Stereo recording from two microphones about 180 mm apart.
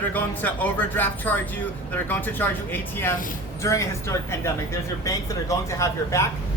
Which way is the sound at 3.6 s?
15° left (ahead or behind).